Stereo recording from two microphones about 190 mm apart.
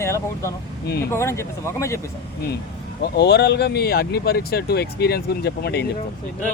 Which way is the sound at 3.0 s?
60° left (ahead or behind).